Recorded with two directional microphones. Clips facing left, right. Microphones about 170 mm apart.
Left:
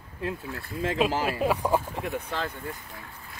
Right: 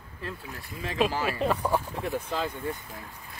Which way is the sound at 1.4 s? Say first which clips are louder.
Left 1 dB; 10° left (ahead or behind).